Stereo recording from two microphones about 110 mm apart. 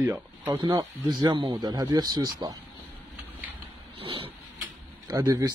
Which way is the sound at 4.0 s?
55° right (ahead or behind).